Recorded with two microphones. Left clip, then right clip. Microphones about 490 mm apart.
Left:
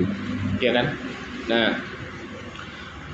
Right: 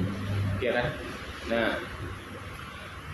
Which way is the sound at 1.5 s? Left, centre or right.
Right.